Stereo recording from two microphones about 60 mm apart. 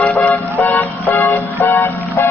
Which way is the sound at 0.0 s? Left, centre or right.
Left.